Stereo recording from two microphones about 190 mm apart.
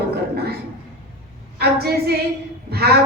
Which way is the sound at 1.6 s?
55° right (ahead or behind).